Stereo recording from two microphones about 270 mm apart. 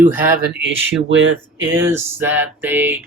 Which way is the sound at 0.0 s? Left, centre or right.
Centre.